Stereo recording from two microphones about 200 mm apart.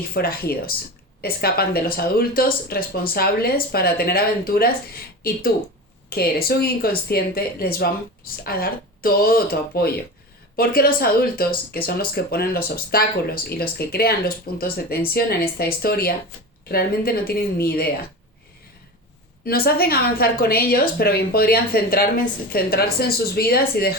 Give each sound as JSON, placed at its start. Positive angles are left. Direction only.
{"t": 0.1, "sound": "speech", "side_deg": 50}
{"t": 6.1, "sound": "speech", "side_deg": 50}
{"t": 19.5, "sound": "speech", "side_deg": 50}